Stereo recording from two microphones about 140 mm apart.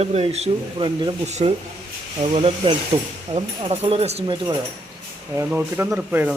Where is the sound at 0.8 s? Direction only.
35° right (ahead or behind).